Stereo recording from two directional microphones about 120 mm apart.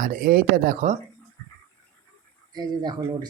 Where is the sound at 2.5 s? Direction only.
35° right (ahead or behind).